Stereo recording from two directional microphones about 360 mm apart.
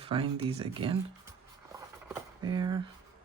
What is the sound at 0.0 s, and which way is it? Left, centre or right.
Speech, centre.